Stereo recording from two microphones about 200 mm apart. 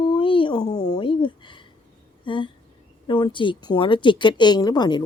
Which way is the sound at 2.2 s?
25° left (ahead or behind).